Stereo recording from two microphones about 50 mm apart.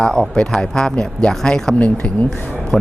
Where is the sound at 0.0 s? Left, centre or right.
Centre.